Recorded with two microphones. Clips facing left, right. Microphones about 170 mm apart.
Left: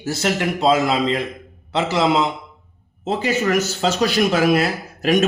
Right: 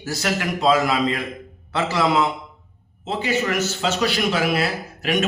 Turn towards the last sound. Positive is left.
turn(degrees=40)  # may be behind; listen again after turning